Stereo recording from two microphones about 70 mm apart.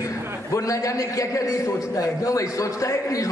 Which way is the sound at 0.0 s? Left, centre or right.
Left.